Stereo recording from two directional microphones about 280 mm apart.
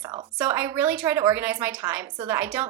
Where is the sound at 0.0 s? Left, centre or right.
Centre.